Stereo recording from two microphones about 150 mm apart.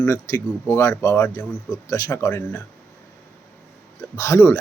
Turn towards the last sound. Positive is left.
turn(degrees=20)  # may be behind; listen again after turning